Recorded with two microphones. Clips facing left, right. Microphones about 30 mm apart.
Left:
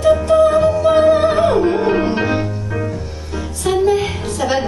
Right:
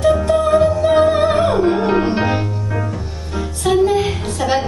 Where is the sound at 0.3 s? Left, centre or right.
Centre.